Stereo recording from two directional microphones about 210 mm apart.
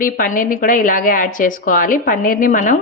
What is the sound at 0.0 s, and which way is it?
A woman's voice, 40° left (ahead or behind).